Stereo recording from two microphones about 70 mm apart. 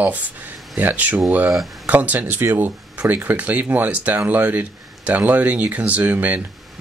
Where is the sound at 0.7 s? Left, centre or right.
Right.